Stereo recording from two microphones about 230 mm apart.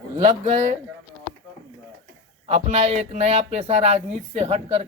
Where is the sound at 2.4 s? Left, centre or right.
Right.